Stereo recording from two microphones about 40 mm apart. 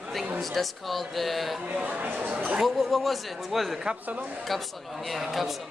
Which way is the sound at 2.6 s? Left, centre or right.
Centre.